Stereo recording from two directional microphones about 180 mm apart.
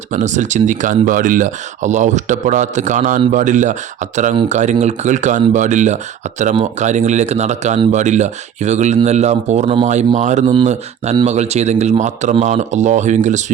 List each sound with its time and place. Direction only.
0.1 s speech: 45° right (ahead or behind)